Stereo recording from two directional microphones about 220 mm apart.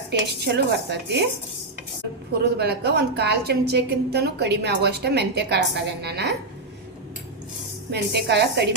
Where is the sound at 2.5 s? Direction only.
50° right (ahead or behind).